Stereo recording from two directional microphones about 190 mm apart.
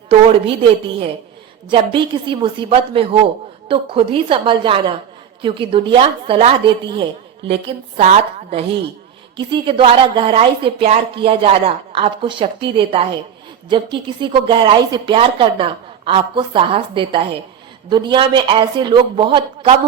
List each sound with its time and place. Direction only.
0.1 s a woman's voice: 30° right (ahead or behind)
1.7 s a woman's voice: 25° right (ahead or behind)